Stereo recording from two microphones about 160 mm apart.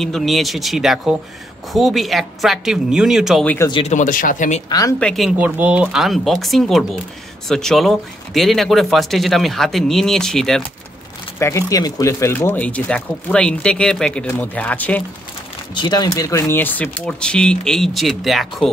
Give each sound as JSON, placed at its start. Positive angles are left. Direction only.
{"t": 0.0, "sound": "speech", "side_deg": 0}
{"t": 3.8, "sound": "speech", "side_deg": 50}
{"t": 4.6, "sound": "speech", "side_deg": 20}
{"t": 5.0, "sound": "speech", "side_deg": 0}
{"t": 11.3, "sound": "speech", "side_deg": 20}
{"t": 15.7, "sound": "speech", "side_deg": 25}